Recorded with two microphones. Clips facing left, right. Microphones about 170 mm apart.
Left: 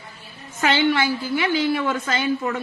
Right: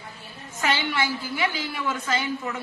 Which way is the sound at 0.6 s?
65° left (ahead or behind).